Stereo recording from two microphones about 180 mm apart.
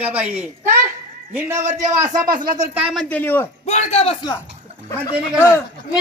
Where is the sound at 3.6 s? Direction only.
35° left (ahead or behind).